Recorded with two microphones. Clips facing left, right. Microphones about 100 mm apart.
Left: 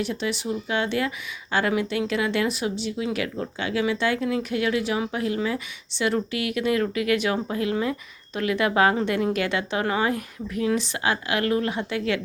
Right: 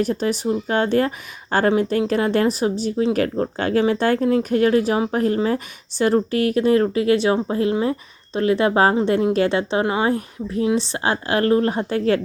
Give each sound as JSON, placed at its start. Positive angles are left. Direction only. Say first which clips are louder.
{"t": 0.0, "sound": "speech", "louder": "right 6 dB", "side_deg": -40}